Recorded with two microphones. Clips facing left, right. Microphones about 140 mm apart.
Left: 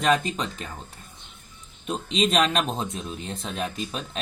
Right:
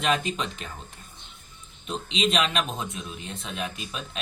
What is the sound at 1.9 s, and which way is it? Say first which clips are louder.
Speech: left 3 dB; 45° left (ahead or behind).